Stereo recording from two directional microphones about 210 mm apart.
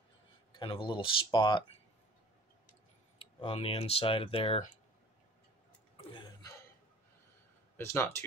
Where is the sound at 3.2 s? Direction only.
25° left (ahead or behind).